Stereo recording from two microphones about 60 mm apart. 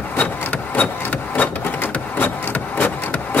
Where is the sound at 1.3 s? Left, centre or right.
Left.